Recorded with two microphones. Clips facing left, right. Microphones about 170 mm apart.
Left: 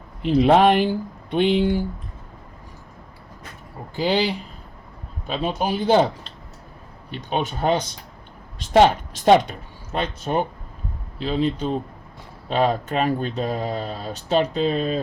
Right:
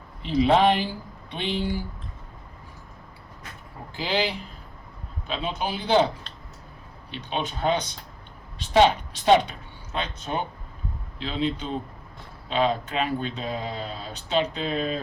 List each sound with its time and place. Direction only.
0.2 s speech: 55° left (ahead or behind)
5.3 s speech: 45° left (ahead or behind)
7.1 s speech: 45° left (ahead or behind)